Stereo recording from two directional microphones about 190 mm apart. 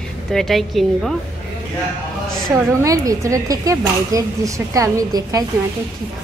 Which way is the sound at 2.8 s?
15° right (ahead or behind).